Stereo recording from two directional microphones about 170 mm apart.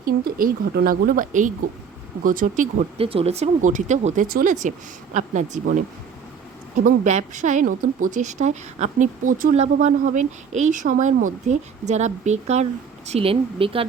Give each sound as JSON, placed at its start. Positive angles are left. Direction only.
{"t": 0.0, "sound": "speech", "side_deg": -55}
{"t": 3.0, "sound": "speech", "side_deg": -35}
{"t": 6.7, "sound": "speech", "side_deg": -45}